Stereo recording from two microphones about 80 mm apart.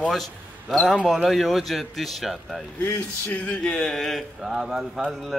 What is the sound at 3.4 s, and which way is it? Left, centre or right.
A man's voice, centre.